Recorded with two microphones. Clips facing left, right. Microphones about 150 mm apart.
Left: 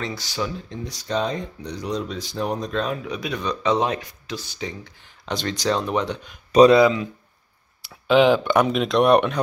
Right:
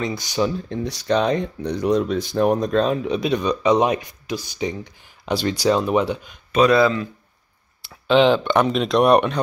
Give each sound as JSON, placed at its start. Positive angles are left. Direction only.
{"t": 0.0, "sound": "speech", "side_deg": -15}
{"t": 0.7, "sound": "speech", "side_deg": -70}
{"t": 2.8, "sound": "speech", "side_deg": -25}
{"t": 3.4, "sound": "speech", "side_deg": -15}
{"t": 6.7, "sound": "speech", "side_deg": 15}
{"t": 7.9, "sound": "speech", "side_deg": 5}